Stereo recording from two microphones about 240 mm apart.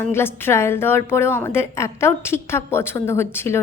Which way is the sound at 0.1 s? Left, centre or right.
Centre.